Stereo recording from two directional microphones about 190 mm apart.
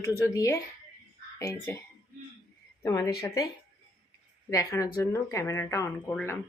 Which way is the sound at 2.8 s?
20° left (ahead or behind).